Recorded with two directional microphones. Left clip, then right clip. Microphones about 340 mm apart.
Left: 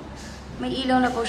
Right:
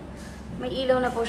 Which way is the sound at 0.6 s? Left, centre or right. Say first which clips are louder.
Left 1 dB; centre.